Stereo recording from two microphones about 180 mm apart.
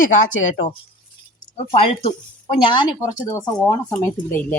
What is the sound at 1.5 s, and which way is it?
Speech, 35° left (ahead or behind).